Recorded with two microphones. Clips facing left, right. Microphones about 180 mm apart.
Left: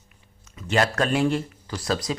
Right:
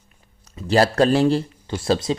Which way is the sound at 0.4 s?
35° right (ahead or behind).